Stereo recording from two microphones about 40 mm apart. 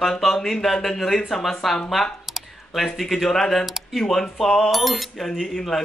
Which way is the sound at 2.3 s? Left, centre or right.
Centre.